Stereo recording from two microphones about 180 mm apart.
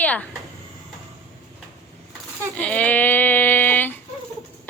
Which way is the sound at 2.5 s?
5° left (ahead or behind).